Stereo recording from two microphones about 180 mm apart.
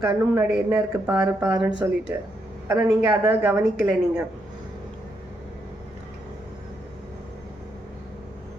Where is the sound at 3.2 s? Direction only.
10° right (ahead or behind).